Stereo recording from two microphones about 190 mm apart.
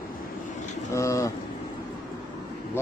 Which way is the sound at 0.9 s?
15° left (ahead or behind).